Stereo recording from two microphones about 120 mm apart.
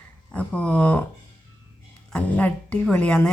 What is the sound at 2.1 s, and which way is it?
A woman's voice, 10° left (ahead or behind).